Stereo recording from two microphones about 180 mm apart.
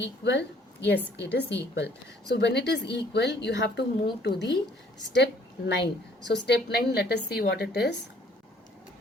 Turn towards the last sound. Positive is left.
turn(degrees=65)  # may be behind; listen again after turning